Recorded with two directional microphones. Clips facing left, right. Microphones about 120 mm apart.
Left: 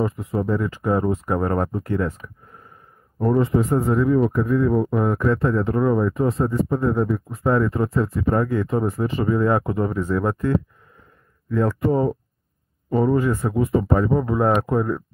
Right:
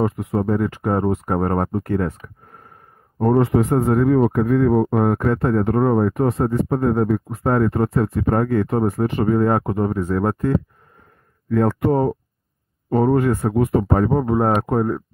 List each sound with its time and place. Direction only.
0.0 s speech: 65° right (ahead or behind)
3.3 s speech: 70° right (ahead or behind)
4.9 s speech: 55° right (ahead or behind)
11.5 s speech: 60° right (ahead or behind)
12.9 s speech: 60° right (ahead or behind)
14.3 s speech: 40° right (ahead or behind)